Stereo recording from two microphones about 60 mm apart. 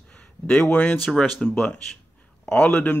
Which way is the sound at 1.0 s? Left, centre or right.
Centre.